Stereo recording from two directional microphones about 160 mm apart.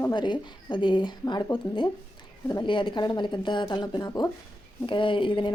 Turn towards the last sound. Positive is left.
turn(degrees=30)  # may be behind; listen again after turning